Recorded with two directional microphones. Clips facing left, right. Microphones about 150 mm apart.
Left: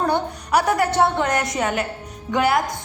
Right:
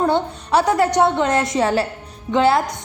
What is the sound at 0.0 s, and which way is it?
A woman's voice, 25° right (ahead or behind).